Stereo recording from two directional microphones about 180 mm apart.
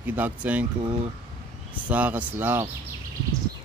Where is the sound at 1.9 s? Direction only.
10° right (ahead or behind).